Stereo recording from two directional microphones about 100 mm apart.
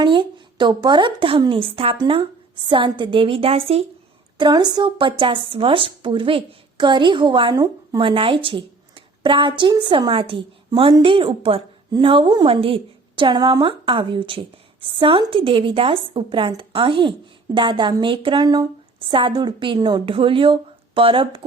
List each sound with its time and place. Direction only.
0.0 s a woman's voice: 50° right (ahead or behind); by 2.0 s 70° right (ahead or behind)
2.0 s a woman's voice: 60° right (ahead or behind)
4.4 s a woman's voice: 45° right (ahead or behind)
7.5 s a woman's voice: 35° right (ahead or behind)
8.0 s a woman's voice: 60° right (ahead or behind)
11.9 s speech: 45° right (ahead or behind)
12.5 s a woman's voice: 70° right (ahead or behind)
18.4 s a woman's voice: 40° right (ahead or behind)
18.9 s a woman's voice: 60° right (ahead or behind)
19.3 s a woman's voice: 45° right (ahead or behind)